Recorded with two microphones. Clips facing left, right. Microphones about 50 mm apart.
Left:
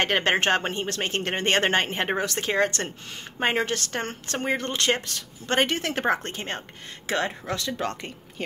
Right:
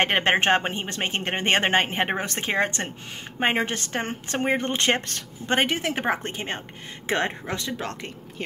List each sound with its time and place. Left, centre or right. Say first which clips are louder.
0.0 s speech: right 2 dB; right
2.2 s speech: left 1 dB; right
5.5 s a woman's voice: right 1 dB; centre
7.1 s speech: right 1 dB; right
7.7 s speech: left 2 dB; centre